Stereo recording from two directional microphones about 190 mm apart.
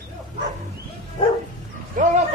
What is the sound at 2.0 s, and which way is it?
Speech, 45° right (ahead or behind).